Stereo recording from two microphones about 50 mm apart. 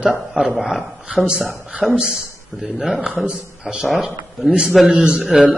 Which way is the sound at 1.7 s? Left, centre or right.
Right.